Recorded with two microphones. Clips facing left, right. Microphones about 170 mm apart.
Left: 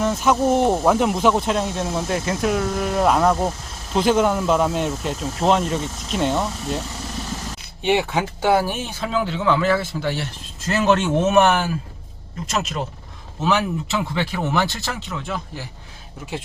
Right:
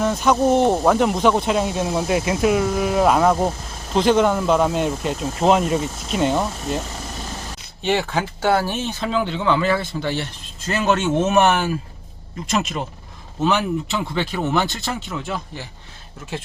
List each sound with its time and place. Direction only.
0.0 s speech: centre (ahead or behind)
7.8 s speech: 15° left (ahead or behind); by 15.6 s centre (ahead or behind)